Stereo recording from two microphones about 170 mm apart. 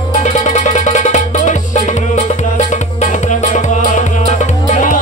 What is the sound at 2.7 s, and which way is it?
Music, 45° left (ahead or behind).